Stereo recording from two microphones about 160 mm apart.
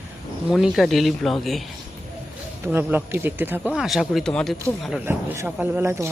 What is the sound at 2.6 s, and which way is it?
Speech, 15° right (ahead or behind).